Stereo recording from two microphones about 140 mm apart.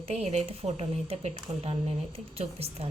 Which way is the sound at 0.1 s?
50° right (ahead or behind).